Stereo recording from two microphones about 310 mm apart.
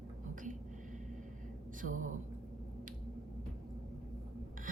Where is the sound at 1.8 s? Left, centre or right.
Right.